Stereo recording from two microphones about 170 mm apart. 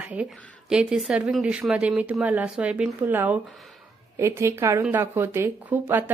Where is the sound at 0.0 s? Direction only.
5° right (ahead or behind).